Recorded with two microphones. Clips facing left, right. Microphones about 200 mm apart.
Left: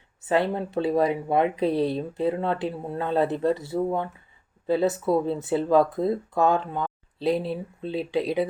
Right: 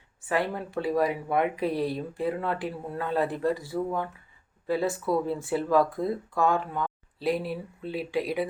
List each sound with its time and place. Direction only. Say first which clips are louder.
0.2 s speech: left 5 dB; 25° left (ahead or behind)